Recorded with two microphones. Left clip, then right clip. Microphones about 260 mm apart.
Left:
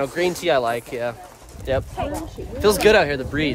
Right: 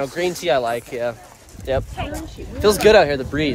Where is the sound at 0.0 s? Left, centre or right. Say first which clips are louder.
Even; centre.